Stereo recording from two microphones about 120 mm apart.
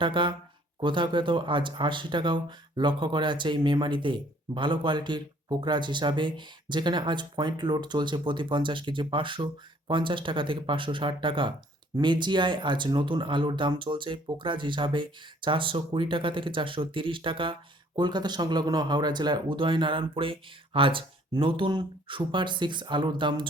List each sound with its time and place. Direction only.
0.0 s speech: 45° right (ahead or behind)